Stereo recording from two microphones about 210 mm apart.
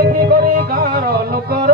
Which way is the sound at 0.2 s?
45° right (ahead or behind).